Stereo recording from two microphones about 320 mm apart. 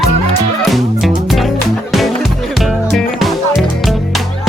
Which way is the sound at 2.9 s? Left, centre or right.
Centre.